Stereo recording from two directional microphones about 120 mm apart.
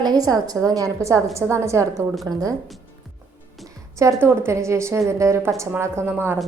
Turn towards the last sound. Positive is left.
turn(degrees=-20)  # may be behind; listen again after turning